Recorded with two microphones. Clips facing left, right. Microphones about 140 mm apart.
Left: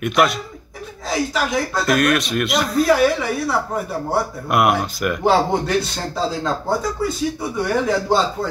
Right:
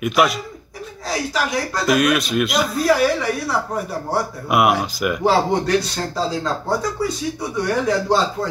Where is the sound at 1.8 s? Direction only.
Centre (ahead or behind).